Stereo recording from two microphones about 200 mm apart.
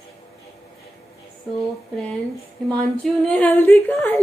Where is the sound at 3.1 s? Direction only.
5° left (ahead or behind).